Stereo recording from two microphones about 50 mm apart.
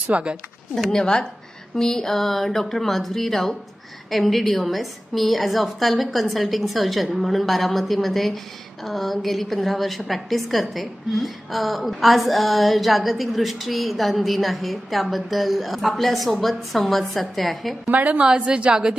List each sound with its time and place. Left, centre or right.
0.1 s a woman's voice: right
0.9 s a woman's voice: centre
17.9 s a woman's voice: right
18.2 s a woman's voice: centre